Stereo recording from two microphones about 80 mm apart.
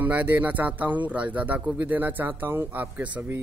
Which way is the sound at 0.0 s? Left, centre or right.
Right.